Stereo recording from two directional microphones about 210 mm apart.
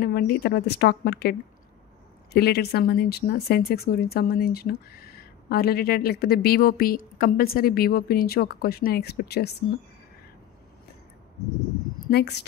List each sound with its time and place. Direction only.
0.0 s a woman's voice: 45° left (ahead or behind)
2.3 s a woman's voice: 50° left (ahead or behind)
12.1 s a woman's voice: 50° left (ahead or behind)